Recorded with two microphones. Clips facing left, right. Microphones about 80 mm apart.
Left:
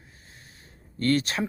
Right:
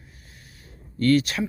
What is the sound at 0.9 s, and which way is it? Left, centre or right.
Speech, left.